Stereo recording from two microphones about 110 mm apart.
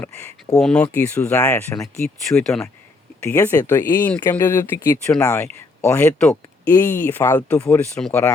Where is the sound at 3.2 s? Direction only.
25° left (ahead or behind).